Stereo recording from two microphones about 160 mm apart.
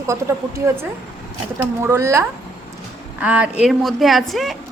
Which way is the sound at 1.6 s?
15° right (ahead or behind).